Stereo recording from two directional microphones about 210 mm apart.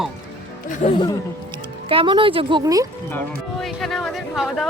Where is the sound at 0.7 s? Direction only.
30° left (ahead or behind).